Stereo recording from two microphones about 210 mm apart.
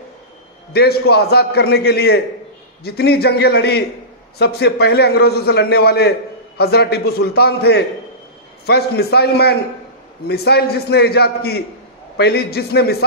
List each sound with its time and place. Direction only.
0.7 s a man's voice: 50° left (ahead or behind)